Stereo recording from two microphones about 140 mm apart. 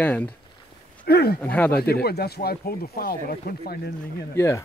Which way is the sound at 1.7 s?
90° left.